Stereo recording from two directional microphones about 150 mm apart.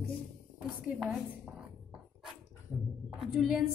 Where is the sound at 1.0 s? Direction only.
Centre (ahead or behind).